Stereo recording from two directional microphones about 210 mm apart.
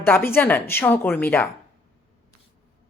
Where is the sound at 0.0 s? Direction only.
10° left (ahead or behind).